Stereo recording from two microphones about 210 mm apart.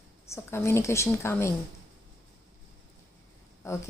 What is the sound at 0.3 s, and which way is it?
Speech, 15° left (ahead or behind).